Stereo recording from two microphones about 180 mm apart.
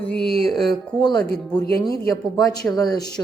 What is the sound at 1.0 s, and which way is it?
Speech, 25° left (ahead or behind).